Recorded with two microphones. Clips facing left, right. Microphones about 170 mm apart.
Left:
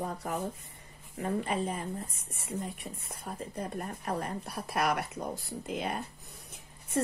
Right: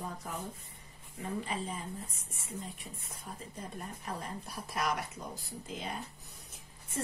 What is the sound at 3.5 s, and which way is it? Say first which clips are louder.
A woman's voice: left 7 dB; 65° left (ahead or behind).